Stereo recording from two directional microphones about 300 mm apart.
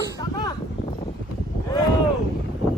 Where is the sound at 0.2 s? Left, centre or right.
Centre.